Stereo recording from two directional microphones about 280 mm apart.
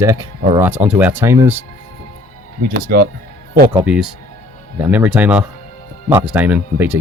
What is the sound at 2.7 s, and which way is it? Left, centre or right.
Speech, right.